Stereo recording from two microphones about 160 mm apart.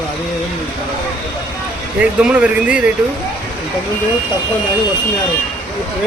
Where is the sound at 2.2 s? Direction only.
10° right (ahead or behind).